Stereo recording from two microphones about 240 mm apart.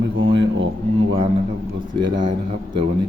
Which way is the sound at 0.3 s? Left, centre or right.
Right.